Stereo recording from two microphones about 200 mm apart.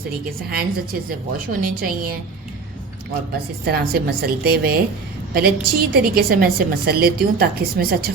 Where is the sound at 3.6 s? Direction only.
50° right (ahead or behind).